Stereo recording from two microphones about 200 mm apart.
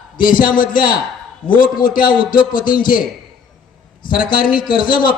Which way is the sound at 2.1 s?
25° left (ahead or behind).